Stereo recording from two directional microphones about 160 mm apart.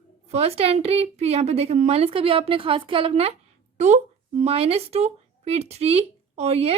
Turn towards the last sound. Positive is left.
turn(degrees=-40)  # may be behind; listen again after turning